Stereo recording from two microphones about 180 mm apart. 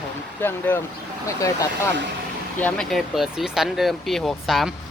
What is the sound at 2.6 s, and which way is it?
Speech, centre (ahead or behind).